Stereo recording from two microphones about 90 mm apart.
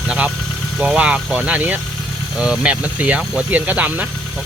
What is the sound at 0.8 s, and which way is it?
Speech, 15° right (ahead or behind).